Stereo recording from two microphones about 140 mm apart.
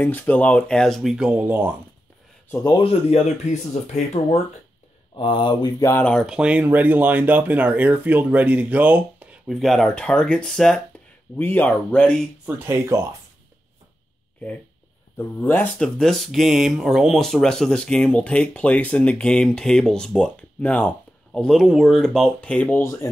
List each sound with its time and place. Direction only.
0.0 s speech: 15° left (ahead or behind); by 1.7 s 10° right (ahead or behind)
2.8 s speech: 45° left (ahead or behind)
5.1 s speech: 35° left (ahead or behind)
5.8 s speech: 20° left (ahead or behind)
6.0 s speech: centre (ahead or behind)
9.5 s speech: centre (ahead or behind)
11.3 s speech: 15° left (ahead or behind)
12.4 s speech: 15° right (ahead or behind)
15.1 s speech: 15° left (ahead or behind)
16.0 s speech: centre (ahead or behind); by 23.0 s 15° left (ahead or behind)